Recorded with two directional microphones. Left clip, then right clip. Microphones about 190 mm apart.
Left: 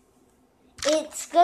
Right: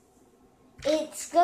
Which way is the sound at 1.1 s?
25° left (ahead or behind).